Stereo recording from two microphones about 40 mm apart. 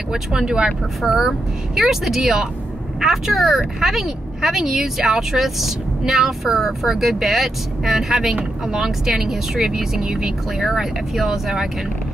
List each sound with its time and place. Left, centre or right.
0.1 s speech: centre
10.6 s speech: centre